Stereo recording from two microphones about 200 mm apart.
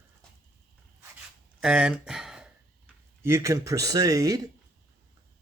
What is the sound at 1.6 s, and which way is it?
Speech, 5° right (ahead or behind).